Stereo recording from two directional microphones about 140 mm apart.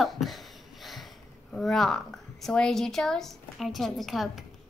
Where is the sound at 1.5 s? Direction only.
5° left (ahead or behind).